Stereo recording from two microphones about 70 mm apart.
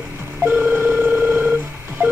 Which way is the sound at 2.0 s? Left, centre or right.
Right.